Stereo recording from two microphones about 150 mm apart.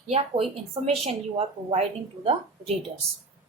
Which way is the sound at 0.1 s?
40° right (ahead or behind).